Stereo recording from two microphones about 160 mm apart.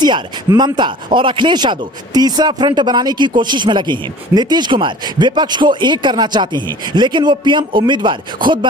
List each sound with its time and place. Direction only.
0.0 s speech: 25° right (ahead or behind)